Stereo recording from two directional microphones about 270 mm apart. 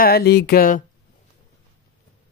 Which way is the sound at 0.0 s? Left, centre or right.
Left.